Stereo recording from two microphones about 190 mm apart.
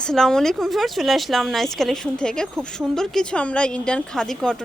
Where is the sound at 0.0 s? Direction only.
5° left (ahead or behind).